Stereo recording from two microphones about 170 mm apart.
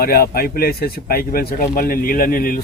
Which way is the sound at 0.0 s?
60° left (ahead or behind).